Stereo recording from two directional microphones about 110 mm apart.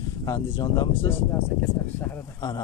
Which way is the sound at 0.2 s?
35° left (ahead or behind).